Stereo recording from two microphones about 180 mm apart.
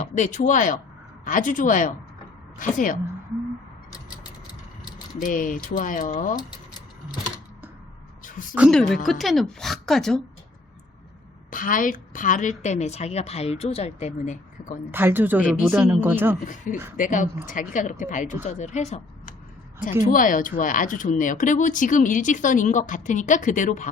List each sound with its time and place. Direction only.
0.0 s speech: 40° left (ahead or behind)
5.2 s speech: 50° left (ahead or behind)
8.2 s a sound: 50° left (ahead or behind)
9.0 s a woman's voice: centre (ahead or behind)
11.5 s a woman's voice: 50° left (ahead or behind)
14.8 s speech: 10° right (ahead or behind)
16.7 s a woman's voice: 45° left (ahead or behind)